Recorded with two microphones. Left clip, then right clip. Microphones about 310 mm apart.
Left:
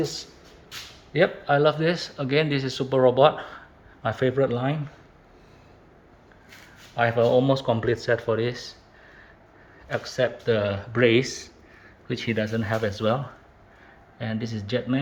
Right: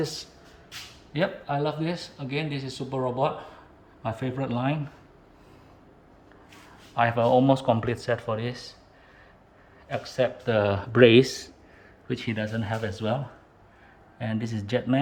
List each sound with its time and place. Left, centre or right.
0.0 s speech: centre
1.1 s speech: centre
6.9 s speech: centre
9.9 s speech: centre
12.0 s speech: centre
14.2 s speech: centre